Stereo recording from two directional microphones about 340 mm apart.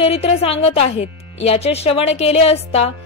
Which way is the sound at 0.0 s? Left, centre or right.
Centre.